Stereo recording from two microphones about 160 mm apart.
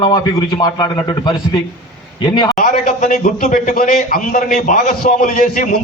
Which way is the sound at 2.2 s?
25° left (ahead or behind).